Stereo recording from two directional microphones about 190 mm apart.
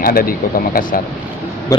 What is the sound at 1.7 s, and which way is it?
Speech, 15° left (ahead or behind).